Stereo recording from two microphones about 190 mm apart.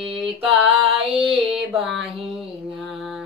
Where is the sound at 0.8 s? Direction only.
30° right (ahead or behind).